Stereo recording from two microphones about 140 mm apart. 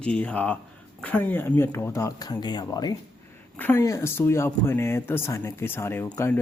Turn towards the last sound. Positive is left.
turn(degrees=15)  # may be behind; listen again after turning